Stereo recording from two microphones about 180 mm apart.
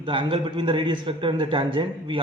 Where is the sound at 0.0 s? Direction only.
30° right (ahead or behind).